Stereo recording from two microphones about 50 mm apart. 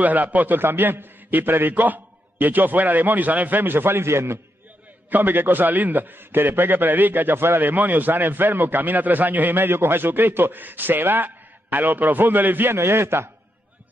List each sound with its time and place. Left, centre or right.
0.0 s a man's voice: right
0.6 s a man's voice: right
5.1 s a man's voice: right
12.7 s a man's voice: right